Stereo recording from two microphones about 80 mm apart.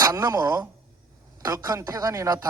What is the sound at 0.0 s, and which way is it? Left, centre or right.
Speech, right.